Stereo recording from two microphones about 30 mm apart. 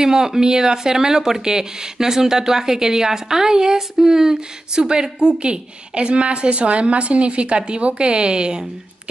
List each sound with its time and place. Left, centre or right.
0.0 s speech: centre